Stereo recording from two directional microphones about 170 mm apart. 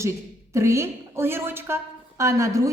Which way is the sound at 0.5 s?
15° right (ahead or behind).